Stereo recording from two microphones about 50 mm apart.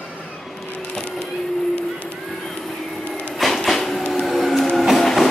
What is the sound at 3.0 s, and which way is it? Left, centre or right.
Music, left.